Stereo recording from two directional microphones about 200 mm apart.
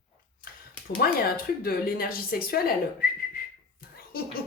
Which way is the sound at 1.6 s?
50° left (ahead or behind).